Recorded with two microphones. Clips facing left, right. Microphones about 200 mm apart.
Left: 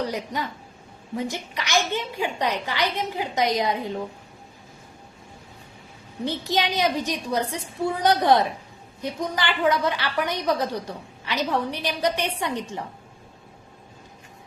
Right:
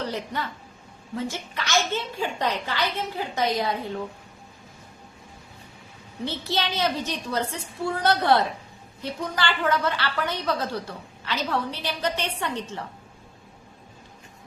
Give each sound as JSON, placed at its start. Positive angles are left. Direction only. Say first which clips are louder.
{"t": 0.0, "sound": "a woman's voice", "louder": "left 2 dB", "side_deg": 15}
{"t": 6.2, "sound": "a woman's voice", "louder": "left 3 dB", "side_deg": 15}